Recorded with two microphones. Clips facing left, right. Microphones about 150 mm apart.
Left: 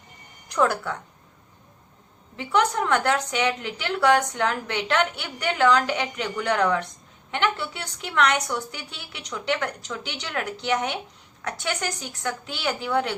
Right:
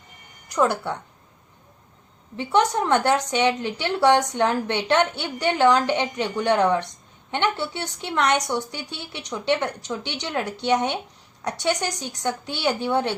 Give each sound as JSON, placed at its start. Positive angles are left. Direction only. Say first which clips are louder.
{"t": 0.5, "sound": "speech", "louder": "right 1 dB", "side_deg": -15}
{"t": 2.3, "sound": "a woman's voice", "louder": "right 2 dB", "side_deg": -30}